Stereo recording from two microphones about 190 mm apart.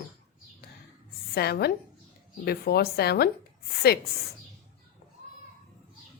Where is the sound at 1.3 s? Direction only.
55° left (ahead or behind).